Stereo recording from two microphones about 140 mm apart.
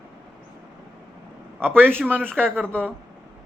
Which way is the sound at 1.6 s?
15° right (ahead or behind).